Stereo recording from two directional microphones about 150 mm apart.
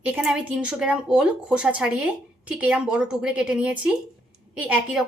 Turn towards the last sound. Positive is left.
turn(degrees=-5)  # may be behind; listen again after turning